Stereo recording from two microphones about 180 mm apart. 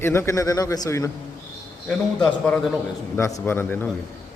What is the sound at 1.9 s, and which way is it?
Speech, 5° left (ahead or behind).